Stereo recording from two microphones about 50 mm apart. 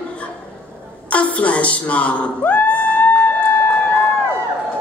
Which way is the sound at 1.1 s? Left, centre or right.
Left.